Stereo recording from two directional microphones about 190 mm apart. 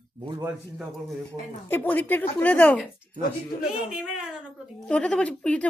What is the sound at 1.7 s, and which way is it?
Speech, 10° left (ahead or behind).